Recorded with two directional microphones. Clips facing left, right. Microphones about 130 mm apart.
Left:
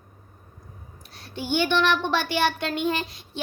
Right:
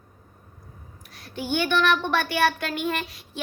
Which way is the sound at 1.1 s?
25° left (ahead or behind).